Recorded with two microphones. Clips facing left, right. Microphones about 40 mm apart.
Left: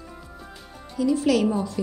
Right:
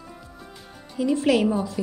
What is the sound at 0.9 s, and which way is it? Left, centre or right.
Speech, right.